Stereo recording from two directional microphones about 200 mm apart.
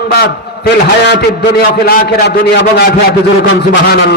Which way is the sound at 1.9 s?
50° left (ahead or behind).